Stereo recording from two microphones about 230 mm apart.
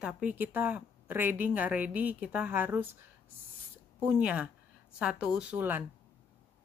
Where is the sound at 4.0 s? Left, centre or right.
Centre.